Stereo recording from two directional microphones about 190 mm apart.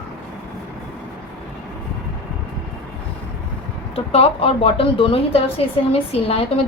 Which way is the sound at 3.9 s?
30° left (ahead or behind).